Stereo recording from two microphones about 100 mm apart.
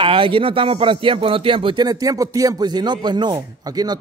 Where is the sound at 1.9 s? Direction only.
35° right (ahead or behind).